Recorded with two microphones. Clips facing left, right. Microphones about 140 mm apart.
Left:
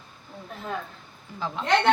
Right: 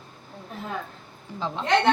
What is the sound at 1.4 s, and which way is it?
Speech, 25° right (ahead or behind).